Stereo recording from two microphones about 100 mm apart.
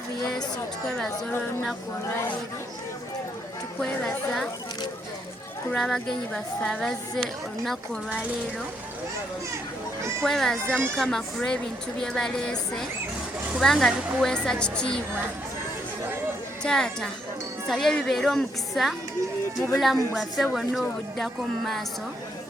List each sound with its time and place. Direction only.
0.9 s a woman's voice: 5° left (ahead or behind)
2.0 s speech: 25° left (ahead or behind)
3.8 s a woman's voice: 5° left (ahead or behind)
5.7 s a woman's voice: 5° left (ahead or behind)
10.2 s a woman's voice: 5° left (ahead or behind)
16.6 s a woman's voice: 5° left (ahead or behind)